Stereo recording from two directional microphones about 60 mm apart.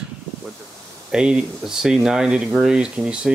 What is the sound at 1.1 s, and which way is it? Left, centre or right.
Speech, centre.